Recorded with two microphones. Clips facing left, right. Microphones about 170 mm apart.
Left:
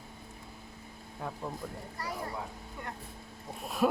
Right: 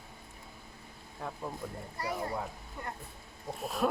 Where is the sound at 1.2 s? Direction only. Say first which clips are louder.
Left 1 dB; centre (ahead or behind).